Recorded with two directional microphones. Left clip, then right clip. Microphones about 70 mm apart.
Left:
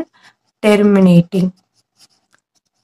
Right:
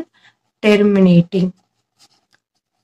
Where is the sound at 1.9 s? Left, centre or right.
Left.